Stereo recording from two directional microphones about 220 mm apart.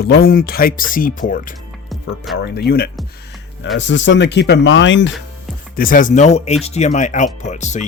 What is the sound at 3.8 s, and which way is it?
Speech, 55° left (ahead or behind).